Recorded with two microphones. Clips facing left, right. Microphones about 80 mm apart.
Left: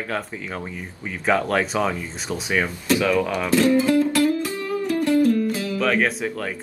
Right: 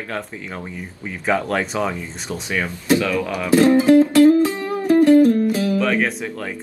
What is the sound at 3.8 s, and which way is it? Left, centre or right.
Music, right.